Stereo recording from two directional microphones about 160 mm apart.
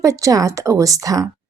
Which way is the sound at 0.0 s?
20° right (ahead or behind).